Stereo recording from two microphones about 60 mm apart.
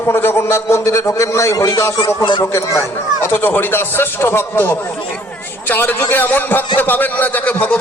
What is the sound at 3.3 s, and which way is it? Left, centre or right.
A man's voice, left.